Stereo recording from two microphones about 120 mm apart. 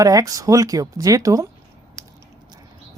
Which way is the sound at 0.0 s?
30° right (ahead or behind).